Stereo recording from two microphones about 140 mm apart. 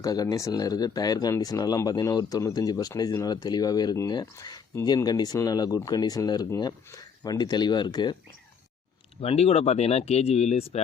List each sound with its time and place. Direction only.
0.0 s speech: 25° left (ahead or behind)
9.2 s speech: 45° left (ahead or behind)